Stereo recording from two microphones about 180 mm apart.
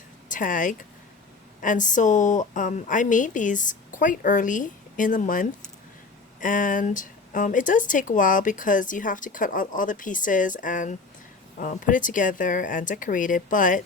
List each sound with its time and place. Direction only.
0.3 s speech: 45° left (ahead or behind)